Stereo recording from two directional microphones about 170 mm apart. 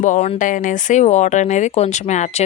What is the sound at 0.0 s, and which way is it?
Speech, 45° left (ahead or behind).